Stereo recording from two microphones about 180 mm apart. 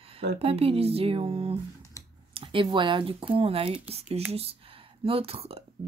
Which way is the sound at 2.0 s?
15° left (ahead or behind).